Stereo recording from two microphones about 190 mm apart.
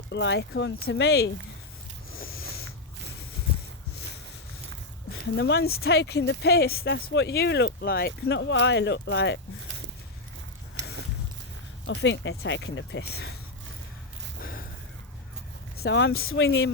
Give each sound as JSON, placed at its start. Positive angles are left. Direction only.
{"t": 0.1, "sound": "speech", "side_deg": 65}
{"t": 2.1, "sound": "a sound", "side_deg": 50}
{"t": 5.4, "sound": "speech", "side_deg": 60}
{"t": 11.9, "sound": "speech", "side_deg": 75}
{"t": 14.4, "sound": "a sound", "side_deg": 50}
{"t": 15.8, "sound": "speech", "side_deg": 65}